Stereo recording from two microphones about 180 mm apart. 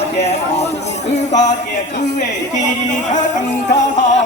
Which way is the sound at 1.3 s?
40° left (ahead or behind).